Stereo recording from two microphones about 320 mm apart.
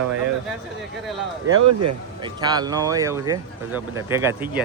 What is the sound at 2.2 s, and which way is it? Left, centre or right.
Speech, centre.